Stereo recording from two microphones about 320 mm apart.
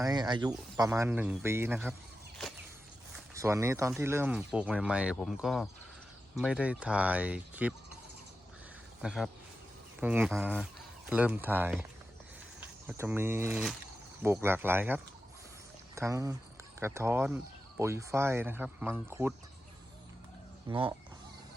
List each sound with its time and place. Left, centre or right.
0.0 s speech: centre
3.3 s speech: centre
9.0 s speech: centre
20.7 s speech: centre